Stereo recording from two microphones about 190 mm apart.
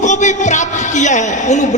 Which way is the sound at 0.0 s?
40° left (ahead or behind).